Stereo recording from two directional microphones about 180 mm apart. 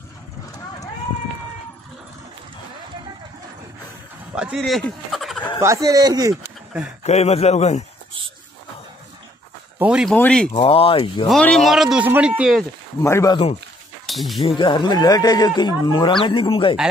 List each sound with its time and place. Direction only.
4.4 s speech: centre (ahead or behind)
5.6 s speech: 20° right (ahead or behind)
7.0 s speech: 40° left (ahead or behind)
9.8 s speech: 5° right (ahead or behind)
10.1 s speech: 5° left (ahead or behind)
10.5 s speech: 30° left (ahead or behind)
11.2 s speech: 5° left (ahead or behind)
13.0 s speech: 15° left (ahead or behind)
14.0 s speech: centre (ahead or behind)
14.4 s speech: 25° left (ahead or behind)